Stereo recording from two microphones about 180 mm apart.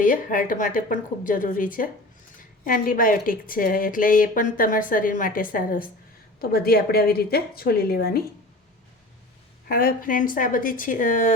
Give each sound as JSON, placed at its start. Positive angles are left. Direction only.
{"t": 0.0, "sound": "a woman's voice", "side_deg": 50}
{"t": 9.6, "sound": "speech", "side_deg": 50}